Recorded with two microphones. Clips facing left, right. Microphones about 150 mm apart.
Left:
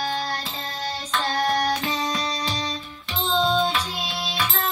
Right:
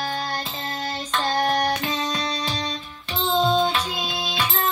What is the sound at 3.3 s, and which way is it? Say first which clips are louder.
Music: right 2 dB; 15° right (ahead or behind).